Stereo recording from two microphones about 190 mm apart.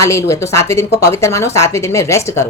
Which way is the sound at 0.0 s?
15° left (ahead or behind).